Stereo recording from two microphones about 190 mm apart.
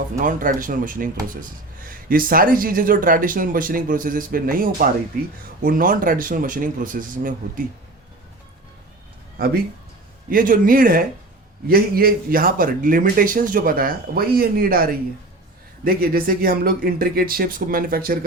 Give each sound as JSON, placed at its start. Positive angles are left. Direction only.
{"t": 0.2, "sound": "speech", "side_deg": -45}
{"t": 9.4, "sound": "speech", "side_deg": -50}